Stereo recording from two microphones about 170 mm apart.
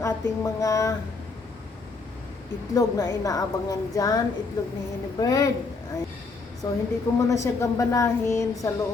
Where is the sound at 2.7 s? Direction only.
20° left (ahead or behind).